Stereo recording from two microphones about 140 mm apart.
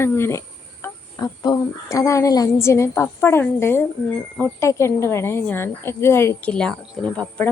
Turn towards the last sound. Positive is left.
turn(degrees=10)  # may be behind; listen again after turning